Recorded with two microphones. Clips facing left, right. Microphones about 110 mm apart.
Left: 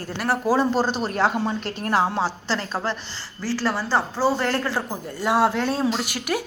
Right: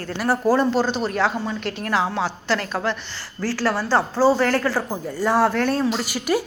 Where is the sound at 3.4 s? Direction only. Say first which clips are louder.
Right 2 dB; 15° left (ahead or behind).